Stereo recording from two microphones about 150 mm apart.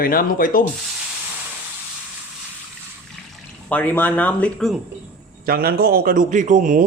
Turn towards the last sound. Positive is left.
turn(degrees=-55)  # may be behind; listen again after turning